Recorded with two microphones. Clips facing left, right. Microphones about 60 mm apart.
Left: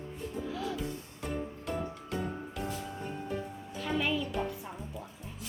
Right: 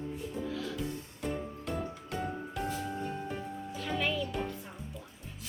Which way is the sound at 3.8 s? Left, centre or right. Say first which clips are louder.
Left 2 dB; centre.